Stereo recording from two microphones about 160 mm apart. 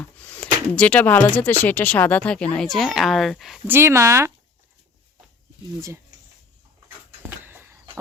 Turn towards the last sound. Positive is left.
turn(degrees=-15)  # may be behind; listen again after turning